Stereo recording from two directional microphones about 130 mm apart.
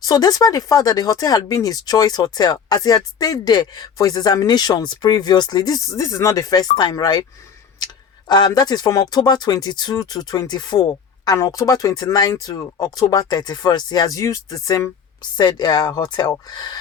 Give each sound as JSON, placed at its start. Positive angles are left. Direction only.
{"t": 0.0, "sound": "speech", "side_deg": 30}
{"t": 8.3, "sound": "speech", "side_deg": 30}
{"t": 15.4, "sound": "speech", "side_deg": 35}